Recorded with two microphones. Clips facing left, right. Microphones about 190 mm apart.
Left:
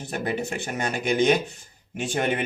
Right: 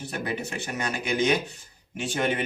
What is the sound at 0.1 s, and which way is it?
Speech, 50° left (ahead or behind).